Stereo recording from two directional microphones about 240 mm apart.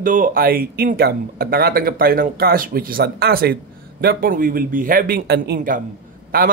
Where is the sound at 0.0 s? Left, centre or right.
Right.